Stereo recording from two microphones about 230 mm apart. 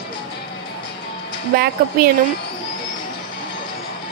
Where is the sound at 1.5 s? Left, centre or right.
Right.